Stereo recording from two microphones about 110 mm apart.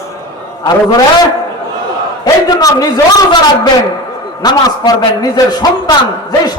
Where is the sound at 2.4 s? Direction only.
35° left (ahead or behind).